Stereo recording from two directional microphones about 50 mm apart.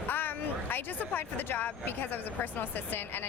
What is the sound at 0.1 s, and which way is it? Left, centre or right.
A woman's voice, left.